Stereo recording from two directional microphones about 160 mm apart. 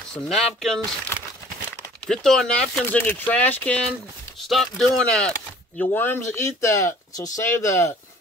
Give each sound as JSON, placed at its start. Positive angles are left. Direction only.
{"t": 0.1, "sound": "speech", "side_deg": 0}
{"t": 2.0, "sound": "speech", "side_deg": 5}